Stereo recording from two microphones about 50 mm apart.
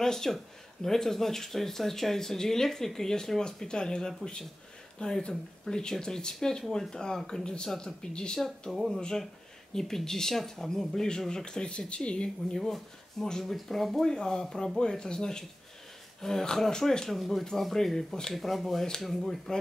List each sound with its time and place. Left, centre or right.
0.0 s speech: centre
8.4 s speech: centre
12.5 s speech: centre
14.0 s speech: centre
17.1 s speech: centre